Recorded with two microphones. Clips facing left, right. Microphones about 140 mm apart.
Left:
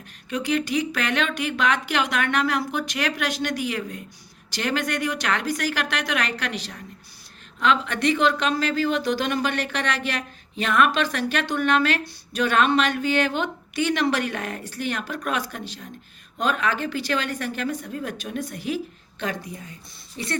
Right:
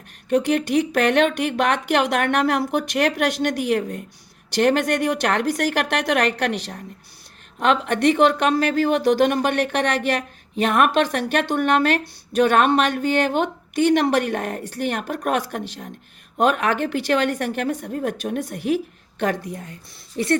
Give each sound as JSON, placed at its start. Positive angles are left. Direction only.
{"t": 0.3, "sound": "speech", "side_deg": -55}